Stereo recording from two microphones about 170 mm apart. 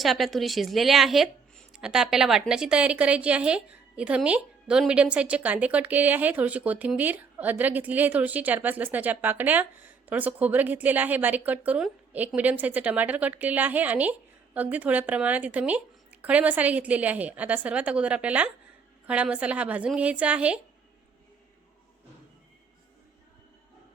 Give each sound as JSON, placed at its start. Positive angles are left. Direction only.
{"t": 0.0, "sound": "a woman's voice", "side_deg": 0}